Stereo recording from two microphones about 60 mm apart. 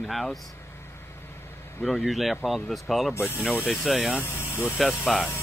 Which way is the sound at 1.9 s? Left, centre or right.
Centre.